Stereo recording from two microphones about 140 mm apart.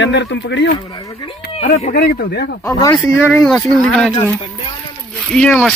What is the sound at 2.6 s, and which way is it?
Speech, 25° left (ahead or behind).